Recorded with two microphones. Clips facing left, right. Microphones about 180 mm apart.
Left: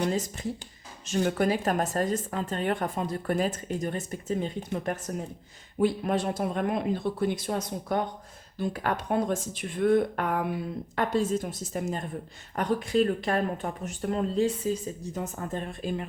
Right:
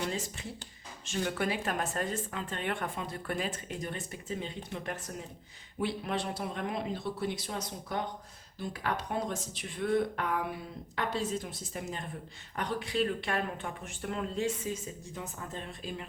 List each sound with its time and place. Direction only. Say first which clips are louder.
0.0 s speech: left 7 dB; 40° left (ahead or behind)